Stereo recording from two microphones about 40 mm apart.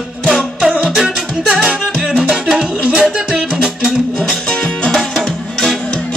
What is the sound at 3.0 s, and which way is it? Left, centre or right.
Music, right.